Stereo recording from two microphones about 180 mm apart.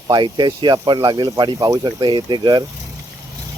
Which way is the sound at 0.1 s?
25° right (ahead or behind).